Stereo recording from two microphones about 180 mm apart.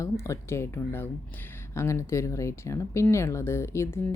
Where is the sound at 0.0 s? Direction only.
15° left (ahead or behind).